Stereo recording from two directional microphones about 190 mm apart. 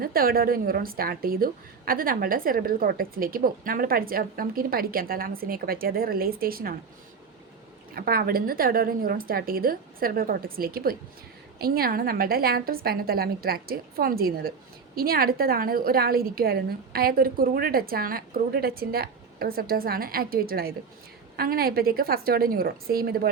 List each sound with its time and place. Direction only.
0.0 s a woman's voice: 50° right (ahead or behind)
7.9 s a woman's voice: 50° right (ahead or behind)